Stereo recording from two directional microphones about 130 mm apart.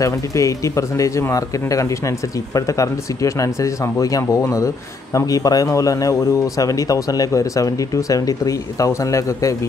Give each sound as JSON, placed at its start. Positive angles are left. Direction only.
{"t": 0.0, "sound": "speech", "side_deg": 25}